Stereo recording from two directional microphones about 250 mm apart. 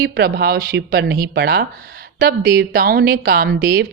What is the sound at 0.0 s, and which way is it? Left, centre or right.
Speech, right.